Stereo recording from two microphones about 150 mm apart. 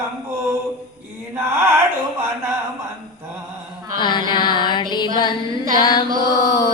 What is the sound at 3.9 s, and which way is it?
Mantra, 30° left (ahead or behind).